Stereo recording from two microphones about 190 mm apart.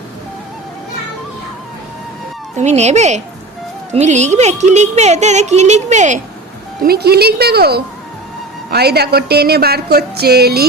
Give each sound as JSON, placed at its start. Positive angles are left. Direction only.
{"t": 2.6, "sound": "speech", "side_deg": -35}
{"t": 6.8, "sound": "speech", "side_deg": -55}